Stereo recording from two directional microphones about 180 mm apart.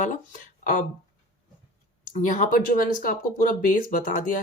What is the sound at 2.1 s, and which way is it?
Speech, 45° left (ahead or behind).